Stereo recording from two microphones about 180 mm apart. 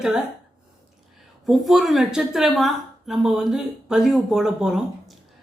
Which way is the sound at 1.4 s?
Centre (ahead or behind).